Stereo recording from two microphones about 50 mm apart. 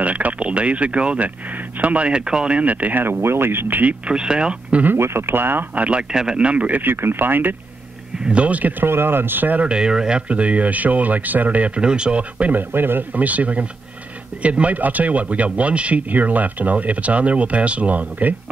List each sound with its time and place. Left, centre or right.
0.0 s speech: right
2.0 s speech: centre; by 3.9 s right
4.1 s speech: centre
4.9 s speech: right
5.8 s speech: right
6.8 s speech: right
8.2 s speech: right
8.8 s speech: right
9.6 s speech: centre
12.5 s speech: right
13.1 s speech: right